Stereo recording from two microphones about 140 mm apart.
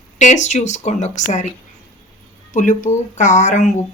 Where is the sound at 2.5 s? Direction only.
65° left (ahead or behind).